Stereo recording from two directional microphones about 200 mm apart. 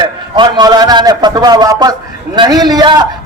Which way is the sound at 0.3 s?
20° right (ahead or behind).